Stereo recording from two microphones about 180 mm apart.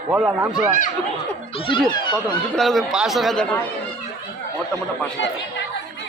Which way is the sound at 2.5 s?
Centre (ahead or behind).